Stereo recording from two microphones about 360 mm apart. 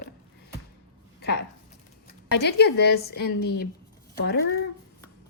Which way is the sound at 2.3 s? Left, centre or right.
Left.